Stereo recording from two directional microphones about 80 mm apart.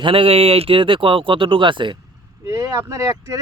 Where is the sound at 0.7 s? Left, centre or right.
Right.